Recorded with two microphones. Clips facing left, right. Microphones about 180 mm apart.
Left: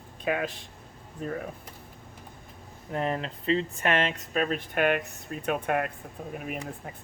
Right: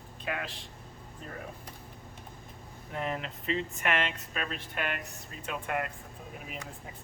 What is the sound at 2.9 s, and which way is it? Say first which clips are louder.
Speech: left 5 dB; 35° left (ahead or behind).